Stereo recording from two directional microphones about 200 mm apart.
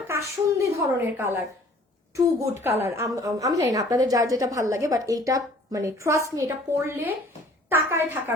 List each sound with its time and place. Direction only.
0.6 s a woman's voice: 10° right (ahead or behind)